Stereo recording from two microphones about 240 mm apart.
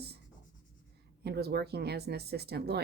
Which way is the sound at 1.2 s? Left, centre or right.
Right.